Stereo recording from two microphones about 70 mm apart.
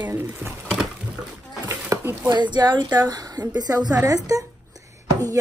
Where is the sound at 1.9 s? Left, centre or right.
Right.